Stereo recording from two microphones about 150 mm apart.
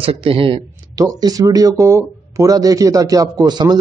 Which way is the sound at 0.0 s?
40° right (ahead or behind).